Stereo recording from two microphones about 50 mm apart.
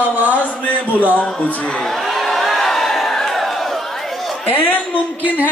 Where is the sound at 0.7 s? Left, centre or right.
Left.